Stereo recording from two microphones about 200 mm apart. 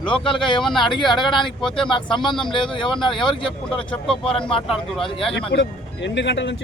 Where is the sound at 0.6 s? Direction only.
Centre (ahead or behind).